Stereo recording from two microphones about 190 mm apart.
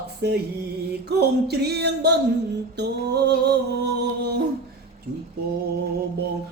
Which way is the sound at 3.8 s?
60° right (ahead or behind).